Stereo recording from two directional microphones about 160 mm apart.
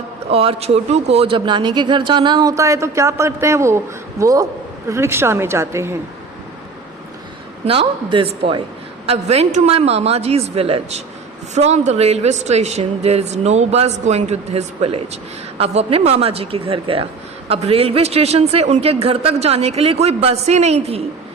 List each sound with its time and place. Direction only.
0.3 s speech: 40° right (ahead or behind); by 6.0 s 15° right (ahead or behind)
7.6 s speech: 35° right (ahead or behind)